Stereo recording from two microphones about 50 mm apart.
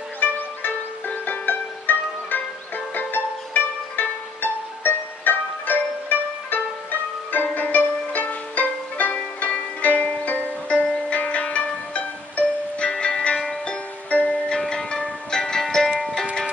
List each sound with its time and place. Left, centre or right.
0.2 s music: left; by 16.1 s centre